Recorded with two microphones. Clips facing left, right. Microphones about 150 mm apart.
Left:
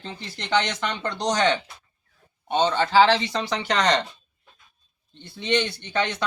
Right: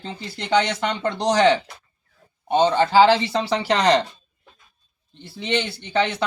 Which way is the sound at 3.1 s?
25° right (ahead or behind).